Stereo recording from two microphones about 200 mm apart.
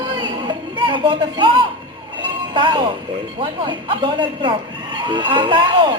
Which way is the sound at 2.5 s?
25° right (ahead or behind).